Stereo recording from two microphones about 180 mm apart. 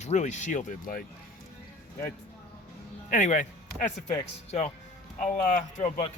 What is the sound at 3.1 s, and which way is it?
Speech, 45° left (ahead or behind).